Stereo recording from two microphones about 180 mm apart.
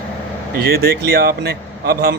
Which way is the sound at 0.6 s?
60° right (ahead or behind).